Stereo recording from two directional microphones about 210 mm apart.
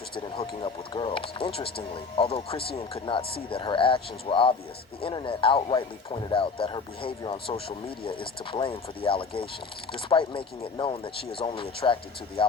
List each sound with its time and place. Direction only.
0.3 s speech: 25° left (ahead or behind)